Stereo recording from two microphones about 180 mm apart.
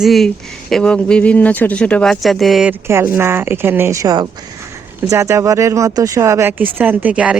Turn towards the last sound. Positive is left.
turn(degrees=-5)  # may be behind; listen again after turning